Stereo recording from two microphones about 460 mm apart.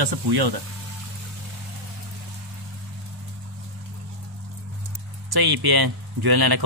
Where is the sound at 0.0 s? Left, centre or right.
Right.